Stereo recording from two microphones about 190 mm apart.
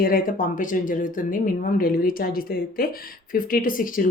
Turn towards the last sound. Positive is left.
turn(degrees=45)  # may be behind; listen again after turning